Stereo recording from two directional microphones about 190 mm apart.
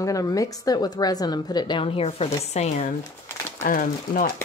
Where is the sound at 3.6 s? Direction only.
45° left (ahead or behind).